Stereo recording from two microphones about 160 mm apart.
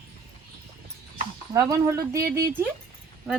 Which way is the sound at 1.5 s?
20° right (ahead or behind).